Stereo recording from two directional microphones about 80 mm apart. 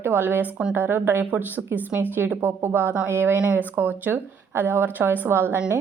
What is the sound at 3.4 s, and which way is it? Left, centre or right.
Speech, centre.